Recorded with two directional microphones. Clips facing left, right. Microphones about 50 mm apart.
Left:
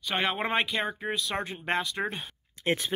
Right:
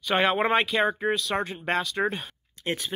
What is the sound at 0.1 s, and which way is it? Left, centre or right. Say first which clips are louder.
Speech: right 6 dB; centre.